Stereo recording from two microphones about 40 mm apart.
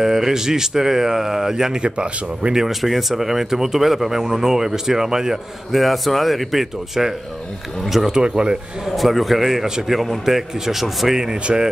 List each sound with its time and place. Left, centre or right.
0.0 s speech: centre; by 2.5 s right
2.5 s a man's voice: centre
8.1 s a man's voice: right
8.8 s a man's voice: centre
11.4 s a man's voice: right